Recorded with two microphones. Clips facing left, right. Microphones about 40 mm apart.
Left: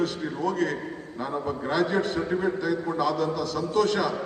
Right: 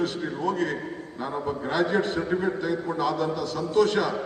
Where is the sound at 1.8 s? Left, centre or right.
Right.